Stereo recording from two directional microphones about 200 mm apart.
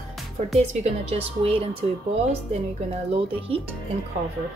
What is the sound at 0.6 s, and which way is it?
A woman's voice, 30° right (ahead or behind).